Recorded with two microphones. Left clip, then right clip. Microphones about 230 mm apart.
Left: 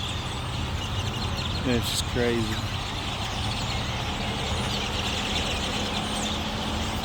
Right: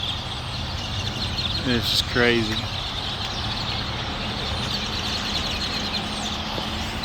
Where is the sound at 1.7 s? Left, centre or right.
Centre.